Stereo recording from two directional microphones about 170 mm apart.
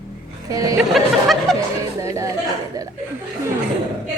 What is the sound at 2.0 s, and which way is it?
Speech, 20° right (ahead or behind).